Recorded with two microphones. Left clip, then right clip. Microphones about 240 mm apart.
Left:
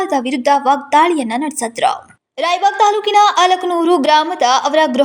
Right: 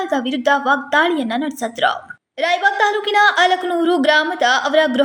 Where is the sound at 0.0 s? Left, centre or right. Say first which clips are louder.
Left 3 dB; centre.